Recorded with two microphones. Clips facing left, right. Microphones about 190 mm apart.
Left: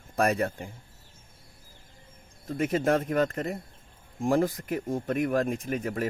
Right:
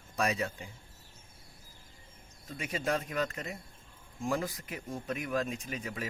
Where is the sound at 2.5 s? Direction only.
50° left (ahead or behind).